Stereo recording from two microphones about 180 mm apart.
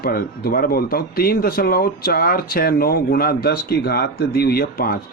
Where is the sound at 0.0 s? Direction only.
55° left (ahead or behind).